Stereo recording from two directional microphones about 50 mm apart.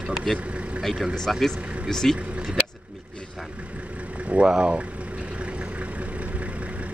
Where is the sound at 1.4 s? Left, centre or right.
Centre.